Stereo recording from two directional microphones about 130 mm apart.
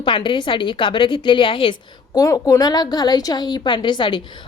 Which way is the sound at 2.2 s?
25° left (ahead or behind).